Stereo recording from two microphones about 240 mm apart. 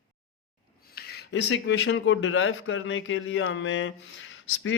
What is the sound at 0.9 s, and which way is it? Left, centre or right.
Speech, left.